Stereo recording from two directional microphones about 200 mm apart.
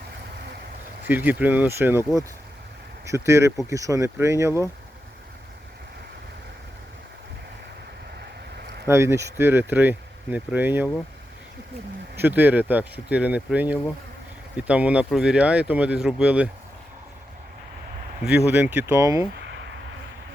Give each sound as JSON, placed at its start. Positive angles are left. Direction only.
{"t": 1.0, "sound": "speech", "side_deg": -10}
{"t": 8.9, "sound": "speech", "side_deg": -15}
{"t": 12.1, "sound": "speech", "side_deg": -10}
{"t": 18.3, "sound": "speech", "side_deg": -10}